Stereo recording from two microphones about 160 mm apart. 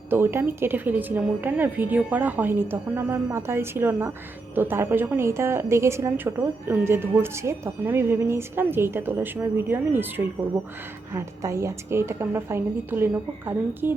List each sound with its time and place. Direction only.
0.1 s a woman's voice: 15° right (ahead or behind)
11.1 s a woman's voice: 20° right (ahead or behind)